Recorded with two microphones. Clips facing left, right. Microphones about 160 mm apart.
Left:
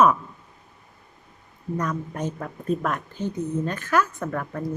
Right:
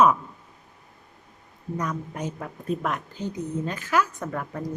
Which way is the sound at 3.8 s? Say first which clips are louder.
Even; 10° right (ahead or behind).